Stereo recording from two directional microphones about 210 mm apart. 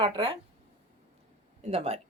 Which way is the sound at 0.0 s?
25° right (ahead or behind).